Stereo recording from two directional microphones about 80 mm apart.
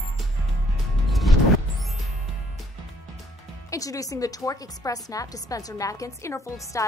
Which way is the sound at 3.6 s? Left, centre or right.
Left.